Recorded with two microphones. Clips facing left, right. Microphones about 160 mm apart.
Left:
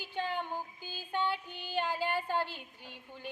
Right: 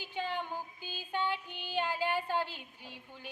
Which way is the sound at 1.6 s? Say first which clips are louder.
Even; 10° right (ahead or behind).